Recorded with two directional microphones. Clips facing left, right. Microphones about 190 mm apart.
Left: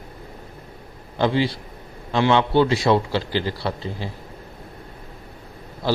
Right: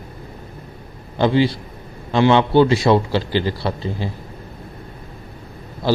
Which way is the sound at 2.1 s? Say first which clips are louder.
Right 4 dB; 25° right (ahead or behind).